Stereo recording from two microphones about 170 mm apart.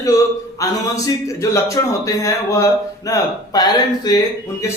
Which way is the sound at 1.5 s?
20° left (ahead or behind).